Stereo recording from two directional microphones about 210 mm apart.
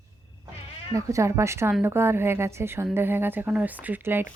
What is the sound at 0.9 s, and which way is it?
Speech, 15° right (ahead or behind).